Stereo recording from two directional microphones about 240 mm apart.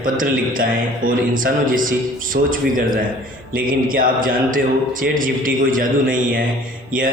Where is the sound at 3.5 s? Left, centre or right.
Right.